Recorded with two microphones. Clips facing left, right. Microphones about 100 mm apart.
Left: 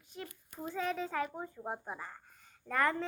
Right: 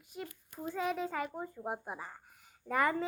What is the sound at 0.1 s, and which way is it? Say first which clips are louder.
Child singing: right 2 dB; 5° right (ahead or behind).